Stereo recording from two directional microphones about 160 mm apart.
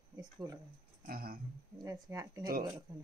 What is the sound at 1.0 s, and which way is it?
Speech, 65° right (ahead or behind).